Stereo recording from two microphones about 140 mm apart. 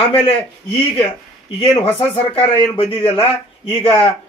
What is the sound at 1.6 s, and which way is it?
A man's voice, 40° left (ahead or behind).